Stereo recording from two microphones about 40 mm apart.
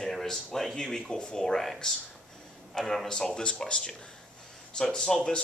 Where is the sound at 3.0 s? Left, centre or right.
Centre.